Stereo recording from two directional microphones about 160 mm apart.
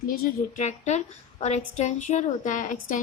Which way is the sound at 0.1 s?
50° left (ahead or behind).